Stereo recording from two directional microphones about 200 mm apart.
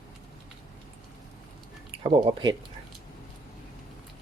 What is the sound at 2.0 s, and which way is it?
Speech, 20° right (ahead or behind).